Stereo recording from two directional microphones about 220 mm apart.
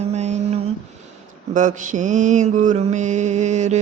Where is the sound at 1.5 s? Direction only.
35° right (ahead or behind).